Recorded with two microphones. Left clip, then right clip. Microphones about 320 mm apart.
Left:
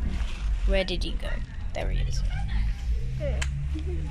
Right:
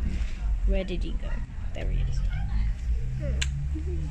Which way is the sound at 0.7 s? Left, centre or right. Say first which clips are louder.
Left 5 dB; centre.